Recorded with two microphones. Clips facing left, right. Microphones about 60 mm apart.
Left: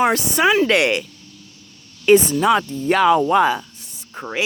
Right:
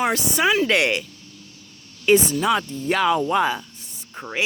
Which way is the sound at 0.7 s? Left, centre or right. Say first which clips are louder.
Left 3 dB; left.